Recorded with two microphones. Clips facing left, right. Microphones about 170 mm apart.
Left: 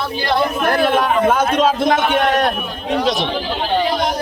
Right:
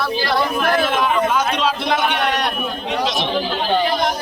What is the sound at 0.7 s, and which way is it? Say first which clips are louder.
A man's voice: left 3 dB; 60° left (ahead or behind).